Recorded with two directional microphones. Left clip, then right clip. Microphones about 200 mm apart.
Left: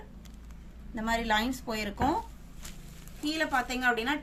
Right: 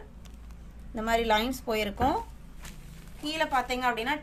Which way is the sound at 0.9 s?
25° right (ahead or behind).